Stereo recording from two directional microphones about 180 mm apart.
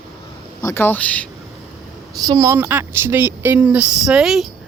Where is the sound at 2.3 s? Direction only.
15° right (ahead or behind).